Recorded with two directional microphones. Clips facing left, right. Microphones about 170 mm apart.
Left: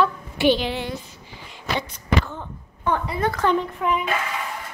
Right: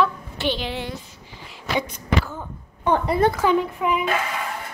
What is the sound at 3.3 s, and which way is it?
Speech, 5° right (ahead or behind).